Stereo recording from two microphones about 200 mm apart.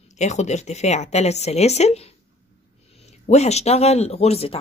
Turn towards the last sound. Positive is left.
turn(degrees=30)  # may be behind; listen again after turning